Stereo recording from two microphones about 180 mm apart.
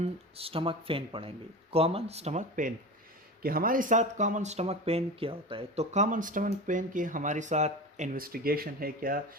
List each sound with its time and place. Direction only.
0.3 s speech: 30° right (ahead or behind); by 9.2 s 55° right (ahead or behind)